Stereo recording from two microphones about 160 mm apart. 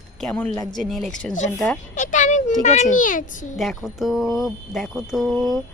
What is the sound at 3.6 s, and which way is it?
A woman's voice, centre (ahead or behind).